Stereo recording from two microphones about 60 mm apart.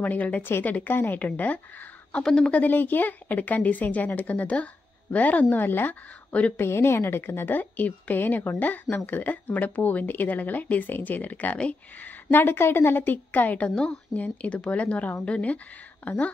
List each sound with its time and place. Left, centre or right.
0.0 s a woman's voice: left
2.2 s speech: centre
2.5 s a woman's voice: left
12.3 s a woman's voice: left
13.7 s speech: centre
14.1 s speech: left